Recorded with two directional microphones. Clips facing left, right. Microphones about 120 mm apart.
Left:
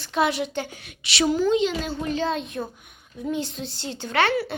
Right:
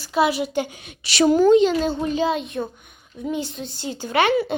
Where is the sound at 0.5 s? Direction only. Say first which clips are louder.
Right 5 dB; 15° right (ahead or behind).